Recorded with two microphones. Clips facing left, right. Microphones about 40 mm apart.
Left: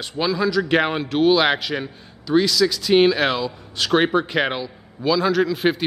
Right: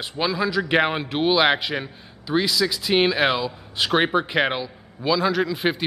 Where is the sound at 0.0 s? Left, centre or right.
Centre.